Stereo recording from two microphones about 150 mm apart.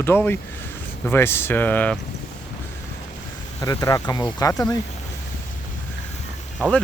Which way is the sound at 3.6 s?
20° left (ahead or behind).